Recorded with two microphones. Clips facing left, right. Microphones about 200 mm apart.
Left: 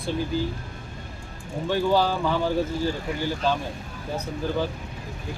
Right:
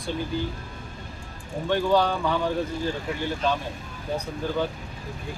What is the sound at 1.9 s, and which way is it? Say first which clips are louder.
Speech: right 1 dB; 5° left (ahead or behind).